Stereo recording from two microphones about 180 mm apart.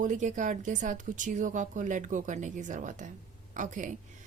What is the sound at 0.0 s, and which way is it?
A woman's voice, 45° right (ahead or behind).